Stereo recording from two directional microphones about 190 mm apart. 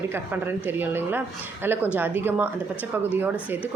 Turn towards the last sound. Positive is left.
turn(degrees=-10)  # may be behind; listen again after turning